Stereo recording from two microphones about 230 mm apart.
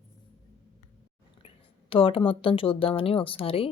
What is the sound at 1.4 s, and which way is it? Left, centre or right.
A woman's voice, left.